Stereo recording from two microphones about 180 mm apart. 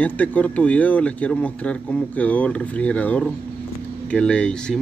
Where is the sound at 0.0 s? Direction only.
10° left (ahead or behind).